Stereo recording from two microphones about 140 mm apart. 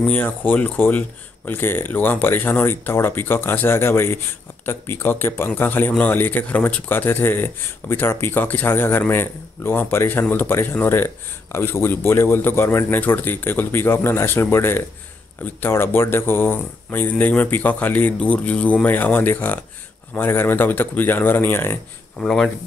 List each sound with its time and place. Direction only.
0.0 s a man's voice: 10° left (ahead or behind)
22.2 s speech: 5° left (ahead or behind)